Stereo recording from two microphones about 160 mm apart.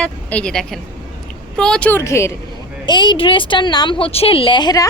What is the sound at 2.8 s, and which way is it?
A woman's voice, 30° left (ahead or behind).